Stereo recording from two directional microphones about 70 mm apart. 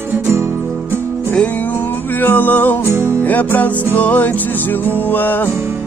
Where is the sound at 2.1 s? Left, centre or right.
Left.